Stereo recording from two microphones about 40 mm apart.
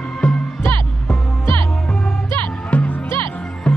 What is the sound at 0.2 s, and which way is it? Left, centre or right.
Music, left.